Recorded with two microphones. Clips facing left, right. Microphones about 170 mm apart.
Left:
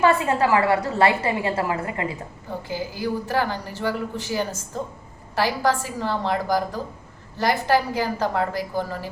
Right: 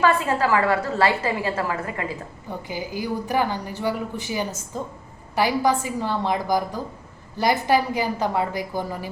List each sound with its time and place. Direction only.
0.0 s a woman's voice: 20° left (ahead or behind)
2.6 s a woman's voice: 15° right (ahead or behind)